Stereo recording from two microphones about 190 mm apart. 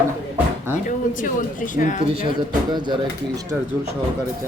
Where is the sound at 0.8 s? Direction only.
45° left (ahead or behind).